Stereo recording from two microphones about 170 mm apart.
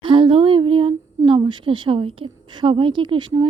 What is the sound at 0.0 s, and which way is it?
Speech, 30° right (ahead or behind).